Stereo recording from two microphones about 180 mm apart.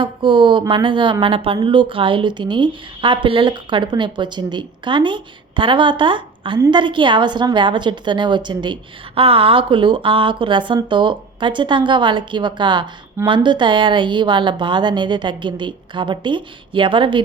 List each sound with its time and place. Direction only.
0.0 s a woman's voice: 25° right (ahead or behind)